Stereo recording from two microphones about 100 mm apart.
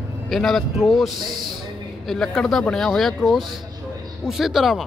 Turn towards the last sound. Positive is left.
turn(degrees=-5)  # may be behind; listen again after turning